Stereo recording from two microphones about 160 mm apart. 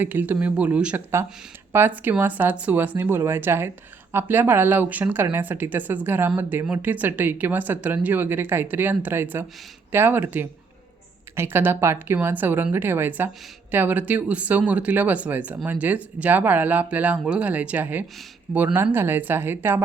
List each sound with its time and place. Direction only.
0.0 s speech: 10° right (ahead or behind)